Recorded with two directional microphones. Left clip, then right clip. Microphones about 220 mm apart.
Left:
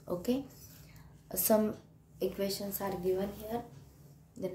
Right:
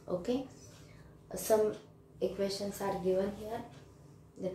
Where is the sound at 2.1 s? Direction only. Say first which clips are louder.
Even; 40° left (ahead or behind).